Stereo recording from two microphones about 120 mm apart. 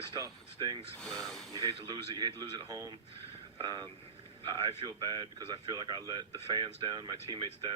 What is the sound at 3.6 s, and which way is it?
Speech, 35° right (ahead or behind).